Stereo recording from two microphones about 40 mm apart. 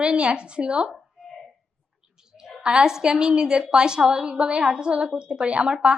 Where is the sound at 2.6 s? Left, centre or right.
Centre.